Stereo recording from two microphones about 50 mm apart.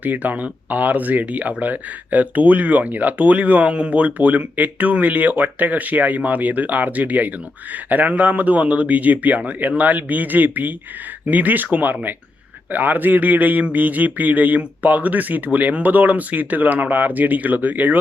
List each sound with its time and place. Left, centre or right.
0.0 s speech: right